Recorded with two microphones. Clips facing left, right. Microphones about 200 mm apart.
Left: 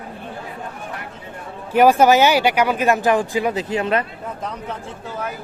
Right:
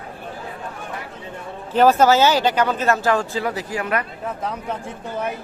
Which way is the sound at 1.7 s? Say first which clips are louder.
Left 2 dB; 10° left (ahead or behind).